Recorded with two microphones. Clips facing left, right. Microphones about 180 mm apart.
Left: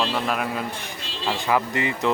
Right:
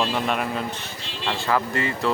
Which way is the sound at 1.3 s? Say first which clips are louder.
Left 1 dB; 15° left (ahead or behind).